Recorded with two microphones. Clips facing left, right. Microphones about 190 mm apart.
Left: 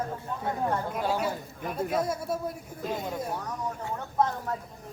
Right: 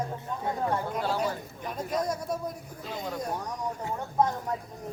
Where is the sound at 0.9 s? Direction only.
10° left (ahead or behind).